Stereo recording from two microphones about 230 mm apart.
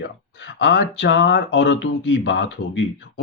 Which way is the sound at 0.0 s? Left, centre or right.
Left.